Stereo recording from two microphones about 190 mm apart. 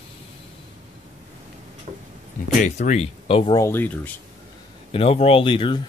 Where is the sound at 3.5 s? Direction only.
15° left (ahead or behind).